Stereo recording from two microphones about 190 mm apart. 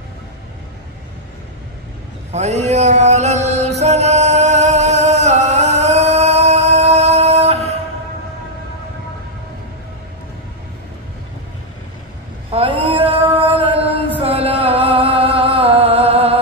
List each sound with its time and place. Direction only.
2.3 s music: 35° right (ahead or behind)
12.4 s a sound: 30° right (ahead or behind)
14.2 s music: 30° right (ahead or behind)